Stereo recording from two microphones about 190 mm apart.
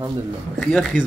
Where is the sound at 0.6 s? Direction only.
5° left (ahead or behind).